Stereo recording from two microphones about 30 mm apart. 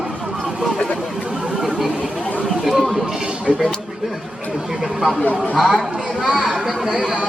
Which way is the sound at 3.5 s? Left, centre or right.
Right.